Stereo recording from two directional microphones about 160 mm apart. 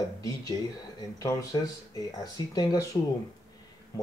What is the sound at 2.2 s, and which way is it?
Speech, 25° left (ahead or behind).